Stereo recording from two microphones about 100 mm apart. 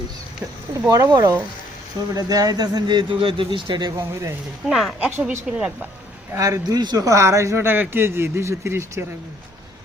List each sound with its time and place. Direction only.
0.7 s a man's voice: 35° right (ahead or behind); by 3.8 s 55° right (ahead or behind)
3.8 s speech: 30° right (ahead or behind)
4.7 s speech: centre (ahead or behind)
5.0 s a woman's voice: 10° right (ahead or behind)
6.3 s a man's voice: 35° right (ahead or behind)